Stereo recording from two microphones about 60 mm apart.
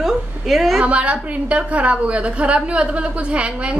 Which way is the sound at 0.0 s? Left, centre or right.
Centre.